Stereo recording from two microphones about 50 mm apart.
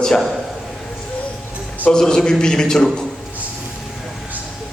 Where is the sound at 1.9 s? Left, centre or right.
Centre.